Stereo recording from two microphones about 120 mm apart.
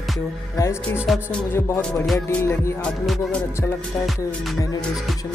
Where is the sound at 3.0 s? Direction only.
Centre (ahead or behind).